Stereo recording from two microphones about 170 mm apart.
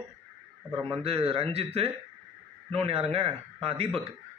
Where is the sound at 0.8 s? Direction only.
35° right (ahead or behind).